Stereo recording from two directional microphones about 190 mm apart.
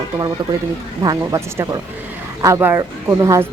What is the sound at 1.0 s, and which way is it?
A woman's voice, 20° right (ahead or behind).